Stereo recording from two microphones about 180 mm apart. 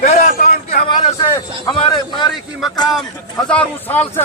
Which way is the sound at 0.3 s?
55° left (ahead or behind).